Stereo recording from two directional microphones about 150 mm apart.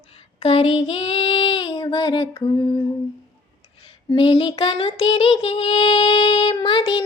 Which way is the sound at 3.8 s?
35° left (ahead or behind).